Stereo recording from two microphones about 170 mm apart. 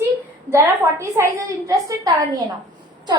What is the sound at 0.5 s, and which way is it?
A woman's voice, 15° right (ahead or behind).